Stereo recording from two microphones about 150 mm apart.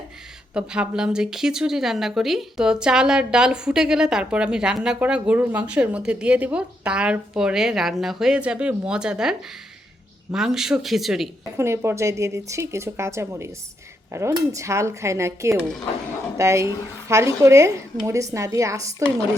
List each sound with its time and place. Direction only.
0.5 s speech: 5° right (ahead or behind)
10.3 s speech: 5° right (ahead or behind)
11.5 s speech: 15° right (ahead or behind)